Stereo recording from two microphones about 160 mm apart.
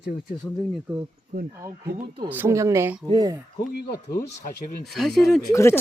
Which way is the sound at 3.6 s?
75° left (ahead or behind).